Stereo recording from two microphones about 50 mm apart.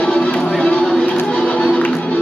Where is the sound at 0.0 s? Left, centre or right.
Left.